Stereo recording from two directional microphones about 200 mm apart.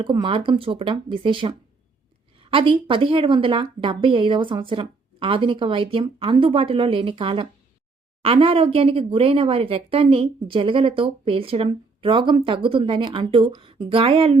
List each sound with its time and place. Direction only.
0.0 s speech: 25° right (ahead or behind)